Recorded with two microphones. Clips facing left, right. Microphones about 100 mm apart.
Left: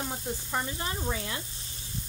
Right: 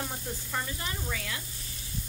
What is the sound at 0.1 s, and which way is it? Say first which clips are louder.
Sizzle: left 3 dB; 25° left (ahead or behind).